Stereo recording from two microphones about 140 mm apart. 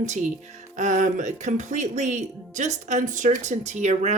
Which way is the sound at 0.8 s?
60° right (ahead or behind).